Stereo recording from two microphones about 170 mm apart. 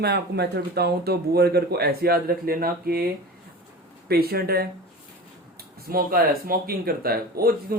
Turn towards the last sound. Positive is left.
turn(degrees=-60)  # may be behind; listen again after turning